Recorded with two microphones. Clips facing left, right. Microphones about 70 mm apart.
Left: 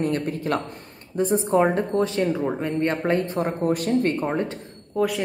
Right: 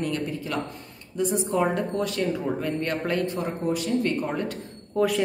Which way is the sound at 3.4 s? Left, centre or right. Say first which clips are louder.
Left 4 dB; left.